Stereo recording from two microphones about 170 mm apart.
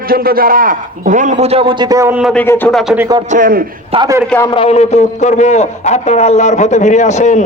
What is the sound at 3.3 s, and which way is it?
Speech, 55° right (ahead or behind).